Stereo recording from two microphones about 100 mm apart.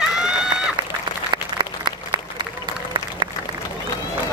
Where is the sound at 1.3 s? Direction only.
50° right (ahead or behind).